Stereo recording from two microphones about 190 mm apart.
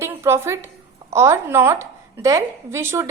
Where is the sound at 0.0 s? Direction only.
15° right (ahead or behind).